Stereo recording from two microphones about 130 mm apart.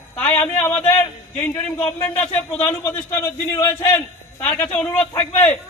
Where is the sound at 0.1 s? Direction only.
10° left (ahead or behind).